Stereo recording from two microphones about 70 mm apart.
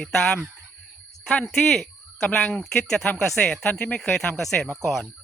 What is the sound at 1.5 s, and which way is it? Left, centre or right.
Speech, centre.